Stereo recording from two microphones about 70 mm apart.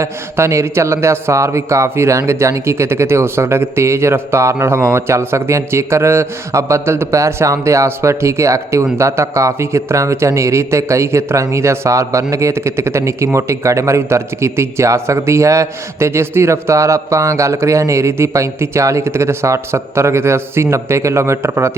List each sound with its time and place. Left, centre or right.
0.0 s a man's voice: right